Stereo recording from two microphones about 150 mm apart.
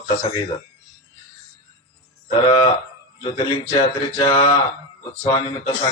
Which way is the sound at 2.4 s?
35° left (ahead or behind).